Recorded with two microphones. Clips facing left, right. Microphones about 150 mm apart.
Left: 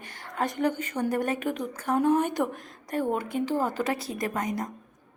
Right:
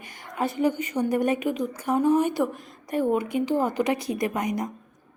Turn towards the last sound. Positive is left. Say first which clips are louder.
# right 3 dB
turn(degrees=-15)  # may be behind; listen again after turning